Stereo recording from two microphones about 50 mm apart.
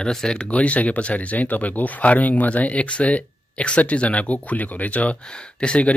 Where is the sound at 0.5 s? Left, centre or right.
Left.